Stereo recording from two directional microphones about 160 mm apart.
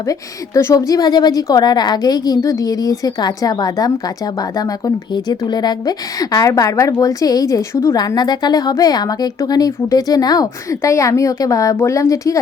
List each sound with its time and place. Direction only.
0.1 s a woman's voice: 20° left (ahead or behind)
5.1 s a woman's voice: 25° left (ahead or behind)